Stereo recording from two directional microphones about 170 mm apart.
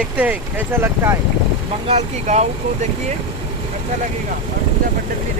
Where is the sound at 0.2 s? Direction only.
10° right (ahead or behind).